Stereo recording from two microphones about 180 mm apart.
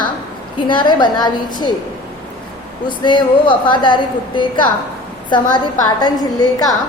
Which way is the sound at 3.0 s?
25° left (ahead or behind).